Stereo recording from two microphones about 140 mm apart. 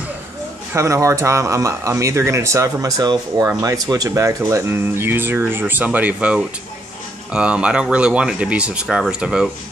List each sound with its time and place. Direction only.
0.7 s speech: 20° right (ahead or behind); by 9.5 s 5° right (ahead or behind)